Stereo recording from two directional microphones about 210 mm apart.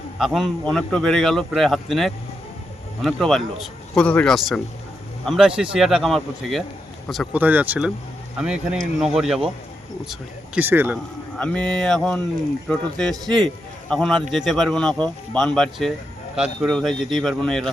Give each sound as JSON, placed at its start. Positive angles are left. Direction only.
{"t": 0.2, "sound": "speech", "side_deg": 0}
{"t": 11.3, "sound": "speech", "side_deg": 5}